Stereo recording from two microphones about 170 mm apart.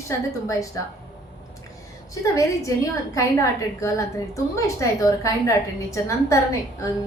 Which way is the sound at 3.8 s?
20° left (ahead or behind).